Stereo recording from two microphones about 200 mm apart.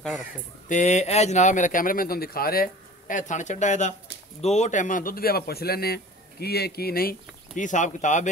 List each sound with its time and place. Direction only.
0.7 s speech: 35° left (ahead or behind)